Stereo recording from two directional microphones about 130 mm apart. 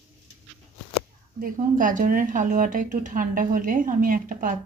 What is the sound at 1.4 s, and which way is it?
A woman's voice, 90° right.